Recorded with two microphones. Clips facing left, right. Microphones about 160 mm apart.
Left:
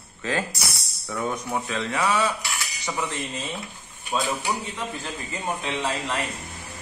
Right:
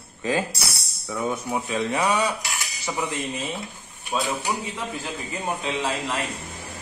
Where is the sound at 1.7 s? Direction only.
15° right (ahead or behind).